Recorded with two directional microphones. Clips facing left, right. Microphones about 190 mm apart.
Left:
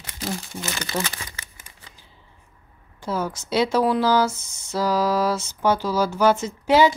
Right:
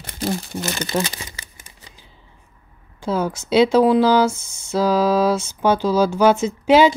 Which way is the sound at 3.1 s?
15° right (ahead or behind).